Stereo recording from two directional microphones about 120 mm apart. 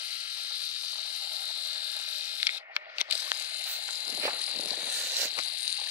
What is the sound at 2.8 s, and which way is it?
Mechanisms, 10° right (ahead or behind).